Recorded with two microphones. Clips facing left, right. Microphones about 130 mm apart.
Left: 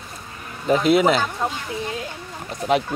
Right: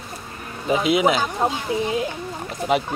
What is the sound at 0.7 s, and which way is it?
Speech, centre (ahead or behind).